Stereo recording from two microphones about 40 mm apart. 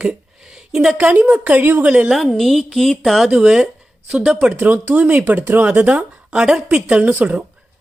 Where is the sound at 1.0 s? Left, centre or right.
Right.